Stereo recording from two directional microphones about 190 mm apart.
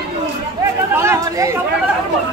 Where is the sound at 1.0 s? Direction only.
15° right (ahead or behind).